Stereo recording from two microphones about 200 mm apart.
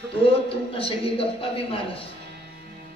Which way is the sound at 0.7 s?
25° left (ahead or behind).